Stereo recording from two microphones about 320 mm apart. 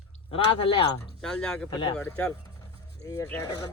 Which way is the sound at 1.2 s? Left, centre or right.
Centre.